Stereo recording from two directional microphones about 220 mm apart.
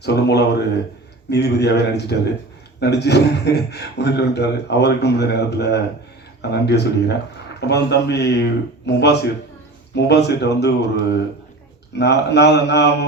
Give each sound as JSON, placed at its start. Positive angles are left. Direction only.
{"t": 0.0, "sound": "a man's voice", "side_deg": 50}